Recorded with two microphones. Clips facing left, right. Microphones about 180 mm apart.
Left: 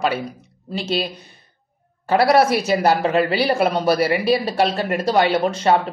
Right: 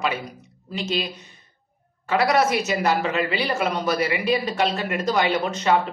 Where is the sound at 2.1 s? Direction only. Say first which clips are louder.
Left 5 dB; 35° left (ahead or behind).